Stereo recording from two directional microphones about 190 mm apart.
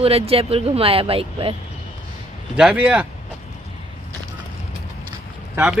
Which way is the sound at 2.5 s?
5° right (ahead or behind).